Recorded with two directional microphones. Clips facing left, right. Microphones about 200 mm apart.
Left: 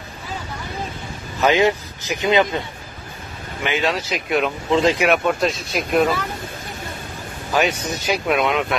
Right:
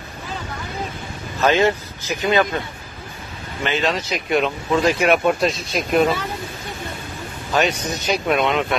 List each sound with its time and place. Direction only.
1.4 s speech: 15° left (ahead or behind)
3.6 s speech: 10° left (ahead or behind)
4.6 s speech: 20° left (ahead or behind)
5.0 s speech: centre (ahead or behind)
7.5 s speech: 5° left (ahead or behind)